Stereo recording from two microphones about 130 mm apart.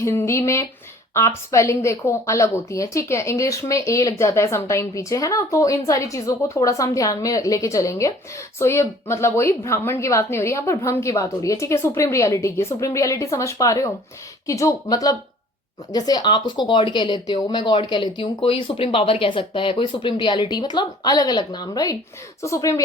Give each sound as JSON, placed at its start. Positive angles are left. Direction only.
{"t": 0.0, "sound": "a woman's voice", "side_deg": 20}